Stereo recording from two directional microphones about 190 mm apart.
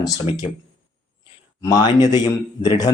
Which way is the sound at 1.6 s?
20° left (ahead or behind).